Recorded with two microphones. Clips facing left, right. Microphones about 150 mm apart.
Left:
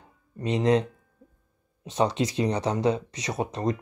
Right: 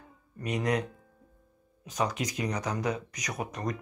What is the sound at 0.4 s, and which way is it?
Speech, 25° left (ahead or behind).